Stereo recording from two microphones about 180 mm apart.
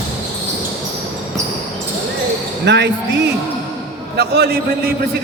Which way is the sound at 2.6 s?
75° right (ahead or behind).